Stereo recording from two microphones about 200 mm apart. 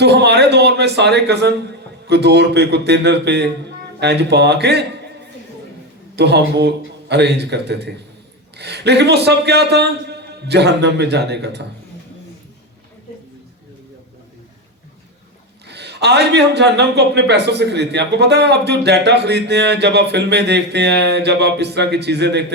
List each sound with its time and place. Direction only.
0.0 s a man's voice: 55° right (ahead or behind)
6.1 s a man's voice: 55° right (ahead or behind)
15.6 s a man's voice: 55° right (ahead or behind)